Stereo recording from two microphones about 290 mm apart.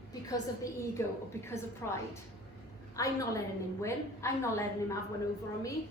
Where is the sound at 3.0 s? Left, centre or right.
Centre.